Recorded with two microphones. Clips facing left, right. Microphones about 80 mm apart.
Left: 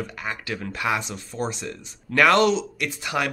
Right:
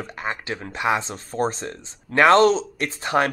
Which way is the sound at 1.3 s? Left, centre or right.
Right.